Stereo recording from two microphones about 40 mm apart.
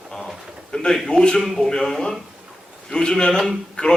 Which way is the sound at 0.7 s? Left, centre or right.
Centre.